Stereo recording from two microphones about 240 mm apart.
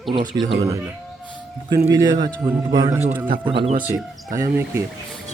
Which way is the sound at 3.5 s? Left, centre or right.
Right.